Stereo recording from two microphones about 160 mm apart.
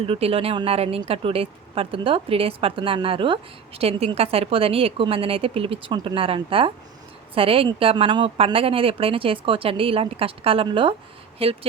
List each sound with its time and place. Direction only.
0.0 s speech: 35° right (ahead or behind)